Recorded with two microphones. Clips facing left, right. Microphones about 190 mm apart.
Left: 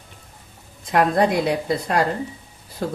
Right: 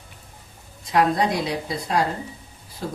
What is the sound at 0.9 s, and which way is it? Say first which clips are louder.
A woman's voice: left 2 dB; 55° left (ahead or behind).